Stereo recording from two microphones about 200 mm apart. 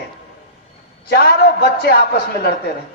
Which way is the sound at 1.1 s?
50° left (ahead or behind).